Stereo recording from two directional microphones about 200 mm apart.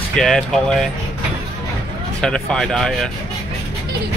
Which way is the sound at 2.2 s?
5° left (ahead or behind).